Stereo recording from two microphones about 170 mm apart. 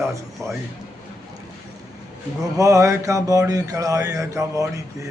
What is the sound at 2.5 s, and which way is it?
Mantra, 20° right (ahead or behind).